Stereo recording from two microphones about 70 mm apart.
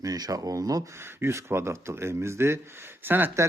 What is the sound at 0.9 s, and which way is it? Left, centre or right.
Speech, right.